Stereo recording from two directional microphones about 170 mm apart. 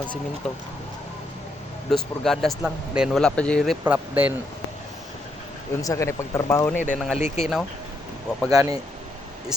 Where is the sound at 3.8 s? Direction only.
10° right (ahead or behind).